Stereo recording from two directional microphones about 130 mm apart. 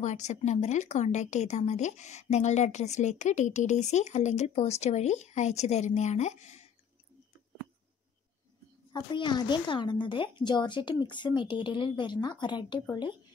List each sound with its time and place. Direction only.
0.0 s speech: 65° left (ahead or behind)
8.9 s speech: 35° left (ahead or behind)